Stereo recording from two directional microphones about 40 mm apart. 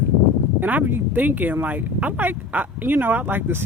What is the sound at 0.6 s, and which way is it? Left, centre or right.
Speech, right.